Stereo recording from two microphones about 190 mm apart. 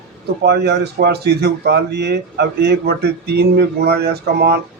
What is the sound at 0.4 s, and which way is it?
Speech, 60° right (ahead or behind).